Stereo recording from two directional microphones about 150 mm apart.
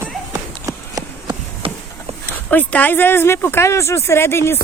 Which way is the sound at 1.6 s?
35° right (ahead or behind).